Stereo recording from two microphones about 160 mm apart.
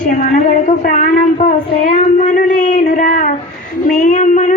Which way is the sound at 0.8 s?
60° left (ahead or behind).